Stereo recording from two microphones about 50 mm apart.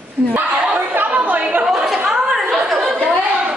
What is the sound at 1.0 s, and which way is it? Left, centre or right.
Chatter, right.